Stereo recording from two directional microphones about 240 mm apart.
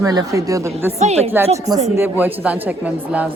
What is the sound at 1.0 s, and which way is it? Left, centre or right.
Speech, right.